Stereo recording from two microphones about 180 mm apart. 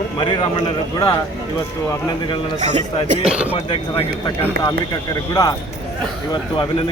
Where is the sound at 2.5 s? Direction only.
40° right (ahead or behind).